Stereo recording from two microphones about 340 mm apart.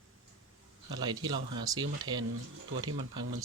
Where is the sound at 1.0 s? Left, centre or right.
Centre.